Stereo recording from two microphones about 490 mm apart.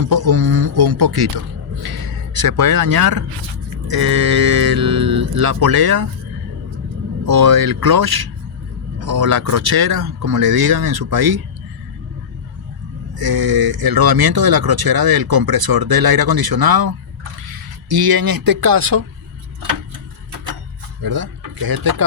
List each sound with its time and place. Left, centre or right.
0.1 s a sound: right
3.8 s speech: right
7.3 s speech: right
13.1 s speech: right
21.0 s speech: right